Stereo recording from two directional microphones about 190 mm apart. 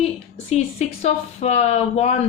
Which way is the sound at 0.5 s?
35° left (ahead or behind).